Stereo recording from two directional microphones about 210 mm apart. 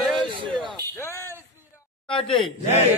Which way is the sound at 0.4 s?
25° right (ahead or behind).